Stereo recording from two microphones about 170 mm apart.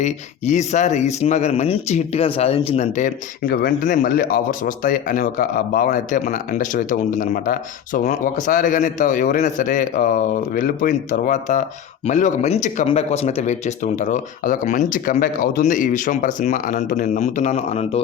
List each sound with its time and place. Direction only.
0.0 s speech: 45° left (ahead or behind)